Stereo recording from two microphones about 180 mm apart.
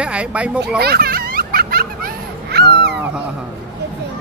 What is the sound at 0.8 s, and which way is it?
Children playing, 60° right (ahead or behind).